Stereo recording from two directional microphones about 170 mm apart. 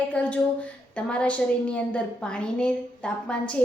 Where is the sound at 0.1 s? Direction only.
10° left (ahead or behind).